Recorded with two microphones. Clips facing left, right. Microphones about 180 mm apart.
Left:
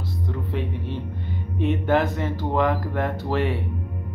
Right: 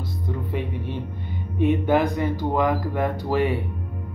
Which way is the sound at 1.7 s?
15° right (ahead or behind).